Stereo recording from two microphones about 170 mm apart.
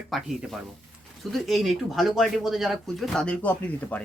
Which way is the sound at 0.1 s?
Centre (ahead or behind).